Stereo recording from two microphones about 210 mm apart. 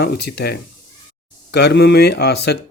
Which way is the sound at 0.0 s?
50° left (ahead or behind).